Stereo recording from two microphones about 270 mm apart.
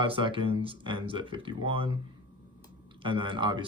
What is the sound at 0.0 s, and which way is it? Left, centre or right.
Speech, centre.